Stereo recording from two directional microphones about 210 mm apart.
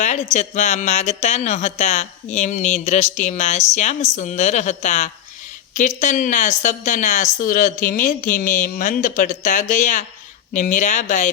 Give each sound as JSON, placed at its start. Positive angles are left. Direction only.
{"t": 0.0, "sound": "speech", "side_deg": 35}